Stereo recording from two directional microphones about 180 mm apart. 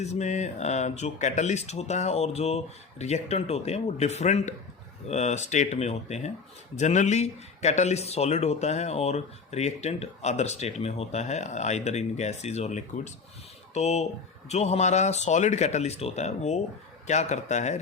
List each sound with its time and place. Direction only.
0.0 s speech: 40° left (ahead or behind)